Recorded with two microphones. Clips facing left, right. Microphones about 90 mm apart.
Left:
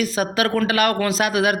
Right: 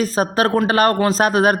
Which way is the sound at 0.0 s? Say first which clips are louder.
Right 3 dB; 40° right (ahead or behind).